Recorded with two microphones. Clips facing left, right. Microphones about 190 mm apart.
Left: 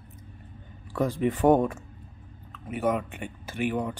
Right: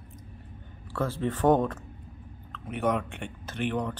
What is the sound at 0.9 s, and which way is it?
Speech, 15° left (ahead or behind).